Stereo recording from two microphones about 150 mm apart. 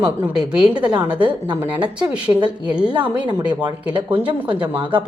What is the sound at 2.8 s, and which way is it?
Speech, 5° right (ahead or behind).